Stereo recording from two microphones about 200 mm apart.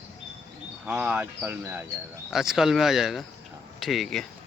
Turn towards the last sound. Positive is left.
turn(degrees=0)  # may be behind; listen again after turning